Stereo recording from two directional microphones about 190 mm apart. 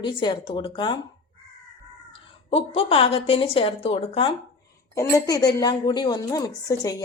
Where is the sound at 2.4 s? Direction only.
30° left (ahead or behind).